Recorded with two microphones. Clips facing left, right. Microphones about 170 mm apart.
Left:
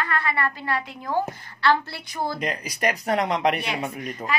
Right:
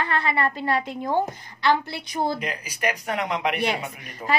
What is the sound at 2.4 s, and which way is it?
A woman's voice, 40° left (ahead or behind).